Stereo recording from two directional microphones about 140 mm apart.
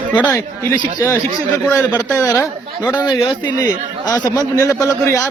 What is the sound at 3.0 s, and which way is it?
A man's voice, 30° left (ahead or behind).